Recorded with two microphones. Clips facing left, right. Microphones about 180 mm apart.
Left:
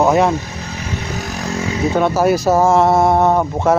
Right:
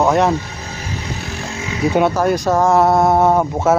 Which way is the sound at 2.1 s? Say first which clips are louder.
Left 2 dB; 5° left (ahead or behind).